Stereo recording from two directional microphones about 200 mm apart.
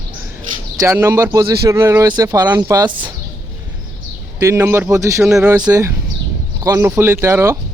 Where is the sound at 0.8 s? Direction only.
15° right (ahead or behind).